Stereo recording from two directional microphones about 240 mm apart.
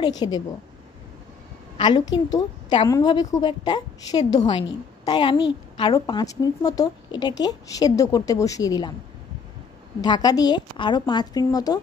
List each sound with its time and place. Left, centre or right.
0.0 s a woman's voice: centre
1.8 s a woman's voice: centre
10.0 s a woman's voice: centre